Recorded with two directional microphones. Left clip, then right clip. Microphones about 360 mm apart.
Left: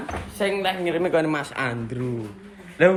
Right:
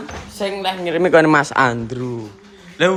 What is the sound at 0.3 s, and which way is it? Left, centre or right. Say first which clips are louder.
Speech: right 2 dB; centre.